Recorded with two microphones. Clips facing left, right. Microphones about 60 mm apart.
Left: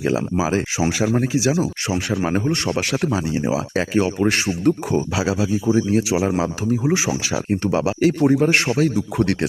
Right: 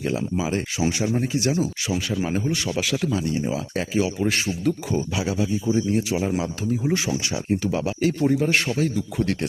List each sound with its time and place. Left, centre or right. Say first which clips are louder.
0.0 s speech: left 5 dB; left
1.9 s speech: left 4 dB; left
3.9 s speech: left 4 dB; left
5.1 s speech: left 4 dB; left
7.5 s speech: left 4 dB; left